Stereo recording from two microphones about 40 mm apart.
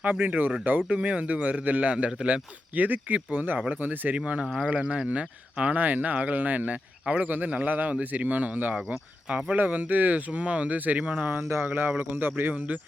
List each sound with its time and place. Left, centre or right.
0.0 s speech: right
0.9 s speech: right
5.8 s speech: right
8.9 s speech: right
11.3 s a man's voice: right